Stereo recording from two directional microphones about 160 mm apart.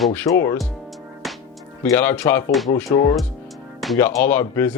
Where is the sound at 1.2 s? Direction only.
Centre (ahead or behind).